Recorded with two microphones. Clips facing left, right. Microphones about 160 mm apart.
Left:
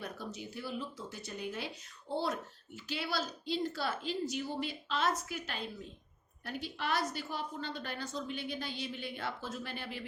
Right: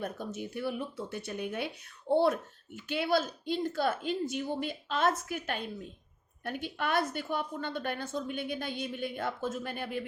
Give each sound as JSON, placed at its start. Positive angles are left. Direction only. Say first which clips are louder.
{"t": 0.0, "sound": "speech", "louder": "right 6 dB", "side_deg": -50}